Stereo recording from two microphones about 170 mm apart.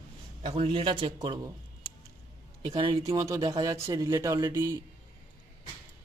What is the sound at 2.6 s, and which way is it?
Speech, 30° right (ahead or behind).